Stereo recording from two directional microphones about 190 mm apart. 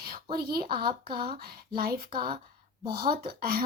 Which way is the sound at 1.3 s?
55° right (ahead or behind).